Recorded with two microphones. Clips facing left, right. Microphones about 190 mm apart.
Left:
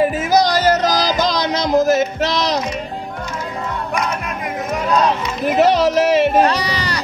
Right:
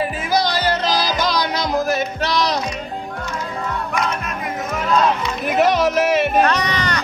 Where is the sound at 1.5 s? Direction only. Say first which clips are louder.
Left 5 dB; 20° left (ahead or behind).